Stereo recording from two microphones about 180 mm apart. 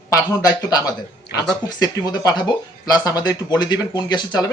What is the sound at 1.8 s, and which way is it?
Speech, 20° left (ahead or behind).